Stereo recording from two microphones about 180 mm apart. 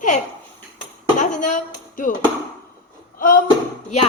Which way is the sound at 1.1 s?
40° left (ahead or behind).